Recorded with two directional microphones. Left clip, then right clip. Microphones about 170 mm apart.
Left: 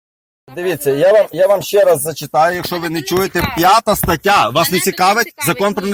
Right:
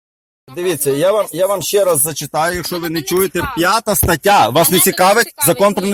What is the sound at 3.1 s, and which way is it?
Speech, 5° right (ahead or behind).